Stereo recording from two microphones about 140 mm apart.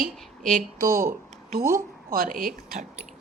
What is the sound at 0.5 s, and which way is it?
A woman's voice, 90° right.